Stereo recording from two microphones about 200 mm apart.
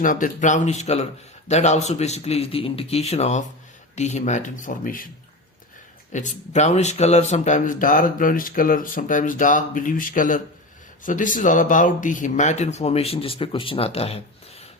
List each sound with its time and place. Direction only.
0.0 s speech: 40° left (ahead or behind)
6.1 s speech: 35° left (ahead or behind)